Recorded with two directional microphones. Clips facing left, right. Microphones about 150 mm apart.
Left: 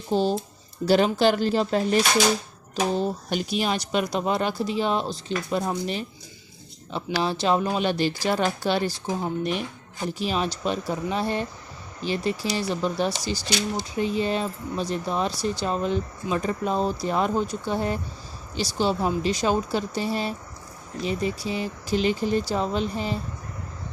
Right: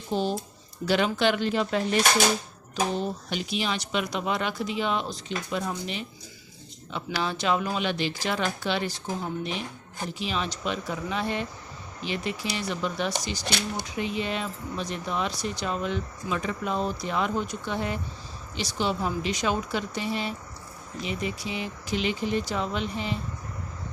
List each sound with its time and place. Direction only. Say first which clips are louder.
0.1 s speech: left 4 dB; 35° left (ahead or behind)
9.4 s speech: left 5 dB; 55° left (ahead or behind)
10.2 s speech: left 4 dB; 40° left (ahead or behind)